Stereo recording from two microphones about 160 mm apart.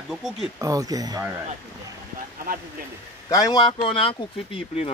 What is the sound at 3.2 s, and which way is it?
Speech, 25° left (ahead or behind).